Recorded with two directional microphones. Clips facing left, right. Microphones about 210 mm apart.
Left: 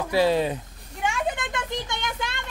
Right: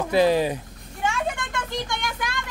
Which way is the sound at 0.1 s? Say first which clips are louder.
Right 2 dB; 15° right (ahead or behind).